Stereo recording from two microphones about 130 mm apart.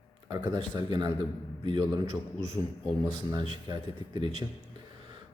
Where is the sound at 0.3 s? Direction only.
35° right (ahead or behind).